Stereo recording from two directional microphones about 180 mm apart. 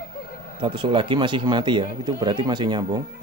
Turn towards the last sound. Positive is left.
turn(degrees=-25)  # may be behind; listen again after turning